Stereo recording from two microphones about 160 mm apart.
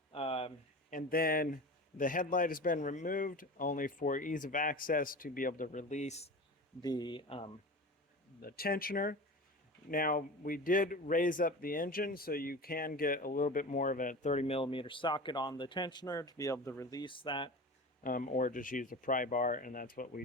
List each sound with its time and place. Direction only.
0.1 s a sound: 35° left (ahead or behind)
0.9 s speech: 60° left (ahead or behind); by 6.3 s 45° left (ahead or behind)
6.8 s speech: 25° left (ahead or behind)
8.4 s speech: 70° left (ahead or behind); by 17.5 s 30° left (ahead or behind)
18.0 s speech: 55° left (ahead or behind)